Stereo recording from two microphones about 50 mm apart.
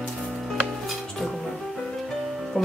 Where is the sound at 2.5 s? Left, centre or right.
Left.